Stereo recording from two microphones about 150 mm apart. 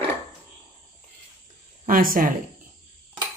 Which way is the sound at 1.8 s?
70° right (ahead or behind).